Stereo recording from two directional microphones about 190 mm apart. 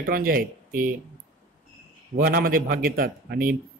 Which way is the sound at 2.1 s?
50° right (ahead or behind).